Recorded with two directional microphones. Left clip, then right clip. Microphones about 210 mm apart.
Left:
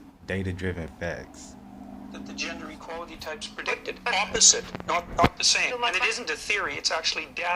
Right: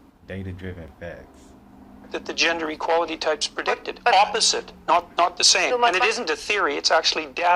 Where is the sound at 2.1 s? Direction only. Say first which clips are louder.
Right 13 dB; 40° right (ahead or behind).